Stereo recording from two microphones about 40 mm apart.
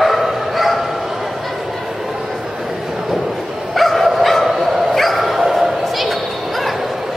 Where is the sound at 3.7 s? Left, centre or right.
Centre.